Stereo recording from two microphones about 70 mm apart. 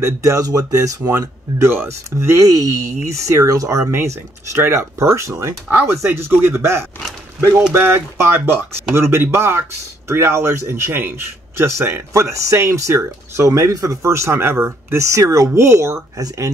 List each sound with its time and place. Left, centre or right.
0.0 s speech: right
1.6 s speech: right
2.4 s speech: right
15.0 s speech: right
16.2 s speech: right